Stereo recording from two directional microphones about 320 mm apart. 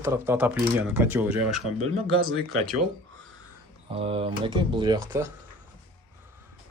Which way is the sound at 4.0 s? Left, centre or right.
Centre.